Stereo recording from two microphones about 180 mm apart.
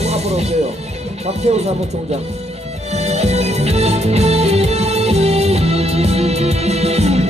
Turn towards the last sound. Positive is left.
turn(degrees=-35)  # may be behind; listen again after turning